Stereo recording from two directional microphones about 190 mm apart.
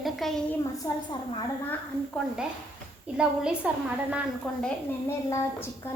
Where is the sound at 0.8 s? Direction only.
20° left (ahead or behind).